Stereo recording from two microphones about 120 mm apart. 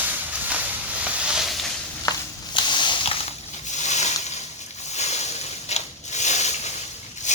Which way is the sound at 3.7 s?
75° left (ahead or behind).